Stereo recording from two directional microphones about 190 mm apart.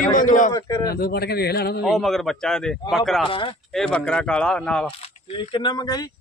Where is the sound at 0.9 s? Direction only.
55° left (ahead or behind).